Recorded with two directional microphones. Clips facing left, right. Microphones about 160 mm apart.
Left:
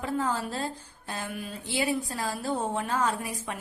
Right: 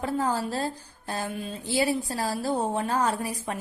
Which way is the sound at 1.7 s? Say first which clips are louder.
Right 3 dB; 35° right (ahead or behind).